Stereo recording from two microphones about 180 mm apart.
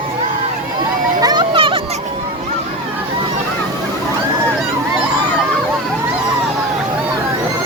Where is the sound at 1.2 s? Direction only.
25° right (ahead or behind).